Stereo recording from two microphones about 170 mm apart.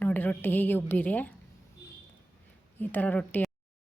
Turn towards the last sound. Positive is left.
turn(degrees=10)  # may be behind; listen again after turning